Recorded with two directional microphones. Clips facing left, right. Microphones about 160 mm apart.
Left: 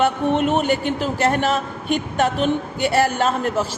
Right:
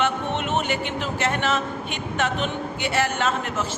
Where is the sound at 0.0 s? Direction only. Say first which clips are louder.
Left 6 dB; 40° left (ahead or behind).